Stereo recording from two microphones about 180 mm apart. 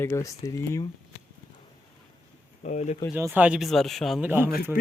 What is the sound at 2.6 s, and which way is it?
Speech, 40° left (ahead or behind).